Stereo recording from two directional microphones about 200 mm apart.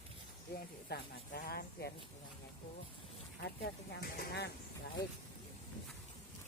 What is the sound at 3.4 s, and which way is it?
Speech, 55° left (ahead or behind).